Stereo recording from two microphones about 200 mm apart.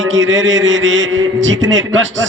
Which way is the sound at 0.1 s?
70° right (ahead or behind).